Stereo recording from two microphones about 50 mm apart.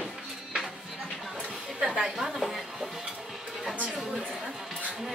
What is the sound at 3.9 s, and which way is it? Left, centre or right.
Chatter, centre.